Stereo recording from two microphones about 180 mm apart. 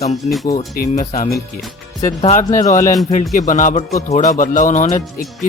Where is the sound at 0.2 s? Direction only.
35° left (ahead or behind).